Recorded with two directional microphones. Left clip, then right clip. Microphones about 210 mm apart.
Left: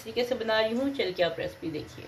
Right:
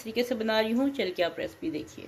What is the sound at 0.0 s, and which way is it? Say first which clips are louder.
Speech: even; 50° right (ahead or behind).